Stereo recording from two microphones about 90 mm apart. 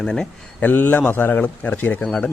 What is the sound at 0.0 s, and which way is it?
Speech, 5° left (ahead or behind).